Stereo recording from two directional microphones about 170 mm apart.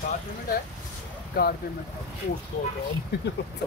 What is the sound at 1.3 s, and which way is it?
Speech, 60° left (ahead or behind).